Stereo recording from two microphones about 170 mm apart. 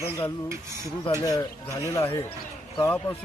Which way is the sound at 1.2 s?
20° left (ahead or behind).